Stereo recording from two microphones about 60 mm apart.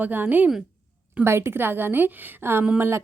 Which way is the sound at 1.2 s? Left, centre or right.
Right.